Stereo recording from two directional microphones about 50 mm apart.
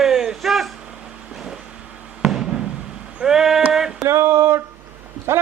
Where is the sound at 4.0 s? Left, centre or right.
Right.